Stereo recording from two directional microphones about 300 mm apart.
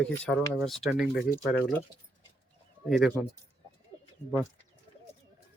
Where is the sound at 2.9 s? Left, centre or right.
Centre.